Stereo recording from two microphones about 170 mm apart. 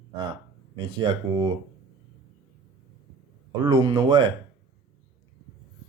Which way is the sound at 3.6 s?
25° right (ahead or behind).